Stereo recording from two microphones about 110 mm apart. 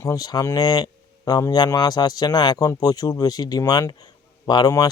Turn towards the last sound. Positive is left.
turn(degrees=40)  # may be behind; listen again after turning